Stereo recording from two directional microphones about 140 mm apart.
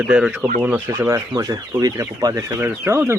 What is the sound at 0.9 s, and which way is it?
Speech, 20° right (ahead or behind).